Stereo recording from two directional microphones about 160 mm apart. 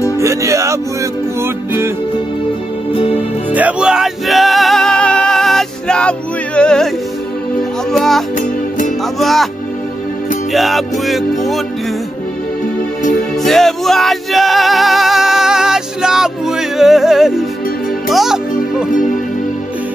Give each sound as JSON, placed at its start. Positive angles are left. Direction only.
{"t": 0.2, "sound": "music", "side_deg": -20}
{"t": 3.5, "sound": "music", "side_deg": -5}
{"t": 7.9, "sound": "music", "side_deg": 0}
{"t": 8.4, "sound": "music", "side_deg": 55}
{"t": 9.2, "sound": "music", "side_deg": 0}
{"t": 10.5, "sound": "music", "side_deg": 0}
{"t": 13.4, "sound": "music", "side_deg": 0}